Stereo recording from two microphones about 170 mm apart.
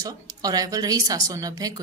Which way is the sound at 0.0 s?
20° right (ahead or behind).